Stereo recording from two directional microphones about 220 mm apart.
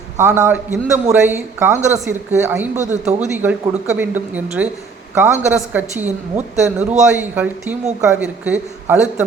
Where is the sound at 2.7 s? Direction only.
30° right (ahead or behind).